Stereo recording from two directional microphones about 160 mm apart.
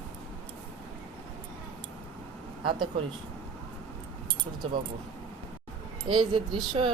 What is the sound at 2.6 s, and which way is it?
Speech, 30° right (ahead or behind).